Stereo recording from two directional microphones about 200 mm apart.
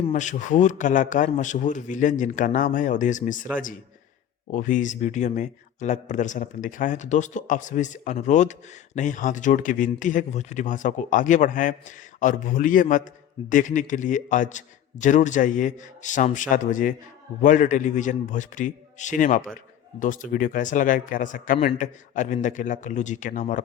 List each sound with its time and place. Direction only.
0.0 s speech: 40° left (ahead or behind)